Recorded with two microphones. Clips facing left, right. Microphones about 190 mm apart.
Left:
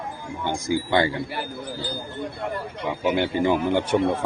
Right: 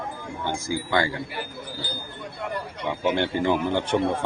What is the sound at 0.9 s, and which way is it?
Speech, 20° left (ahead or behind).